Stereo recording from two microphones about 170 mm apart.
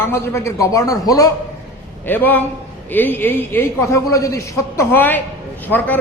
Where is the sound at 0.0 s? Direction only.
15° left (ahead or behind).